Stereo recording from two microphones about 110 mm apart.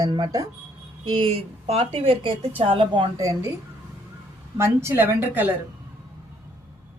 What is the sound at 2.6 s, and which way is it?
Speech, 50° right (ahead or behind).